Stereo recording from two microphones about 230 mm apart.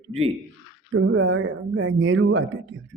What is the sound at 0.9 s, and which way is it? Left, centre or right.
Speech, right.